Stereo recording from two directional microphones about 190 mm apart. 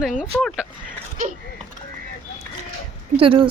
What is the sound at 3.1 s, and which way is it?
Speech, 30° right (ahead or behind).